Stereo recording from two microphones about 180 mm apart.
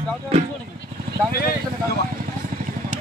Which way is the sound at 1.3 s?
60° left (ahead or behind).